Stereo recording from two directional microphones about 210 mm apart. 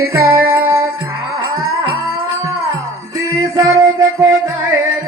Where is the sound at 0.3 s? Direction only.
45° right (ahead or behind).